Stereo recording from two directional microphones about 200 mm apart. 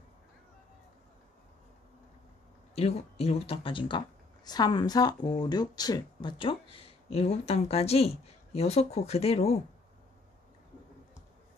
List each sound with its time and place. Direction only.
2.7 s speech: 30° left (ahead or behind)